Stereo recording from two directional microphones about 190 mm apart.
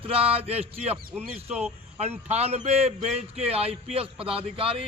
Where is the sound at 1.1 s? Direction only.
5° right (ahead or behind).